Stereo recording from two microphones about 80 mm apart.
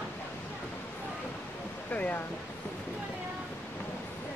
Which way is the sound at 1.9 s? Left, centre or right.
Centre.